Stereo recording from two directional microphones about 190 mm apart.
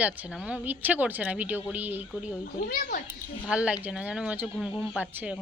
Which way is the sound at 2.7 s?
40° left (ahead or behind).